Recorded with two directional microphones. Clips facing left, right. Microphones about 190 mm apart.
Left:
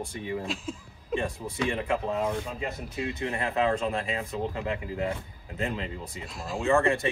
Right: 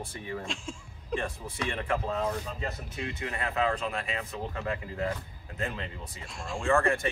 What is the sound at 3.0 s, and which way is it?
Speech, 25° left (ahead or behind).